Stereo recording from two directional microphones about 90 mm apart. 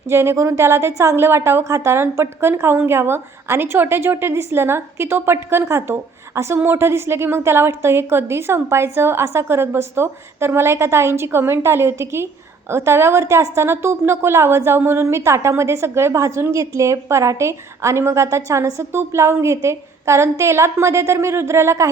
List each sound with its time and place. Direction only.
0.1 s a woman's voice: 30° right (ahead or behind)